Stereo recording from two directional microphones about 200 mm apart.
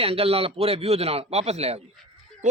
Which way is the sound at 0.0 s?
30° right (ahead or behind).